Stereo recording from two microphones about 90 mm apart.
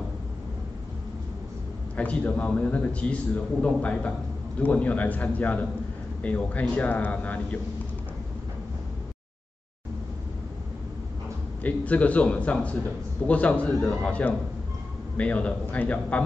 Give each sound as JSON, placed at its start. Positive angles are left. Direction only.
{"t": 2.0, "sound": "a man's voice", "side_deg": 15}
{"t": 11.6, "sound": "a man's voice", "side_deg": 15}